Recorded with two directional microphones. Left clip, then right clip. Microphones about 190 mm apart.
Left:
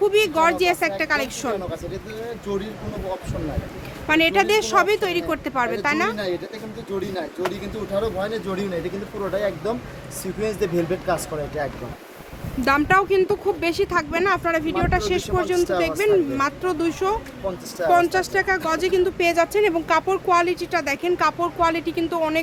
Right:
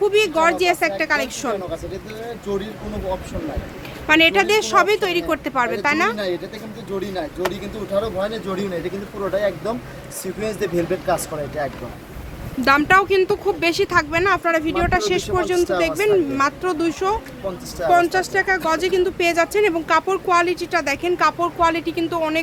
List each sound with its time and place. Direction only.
0.0 s speech: 5° left (ahead or behind)
4.0 s speech: centre (ahead or behind)
12.6 s speech: centre (ahead or behind)